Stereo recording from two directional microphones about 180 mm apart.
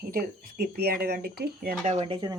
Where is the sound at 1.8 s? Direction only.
35° right (ahead or behind).